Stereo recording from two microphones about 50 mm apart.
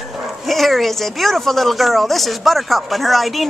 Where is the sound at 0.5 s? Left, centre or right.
Centre.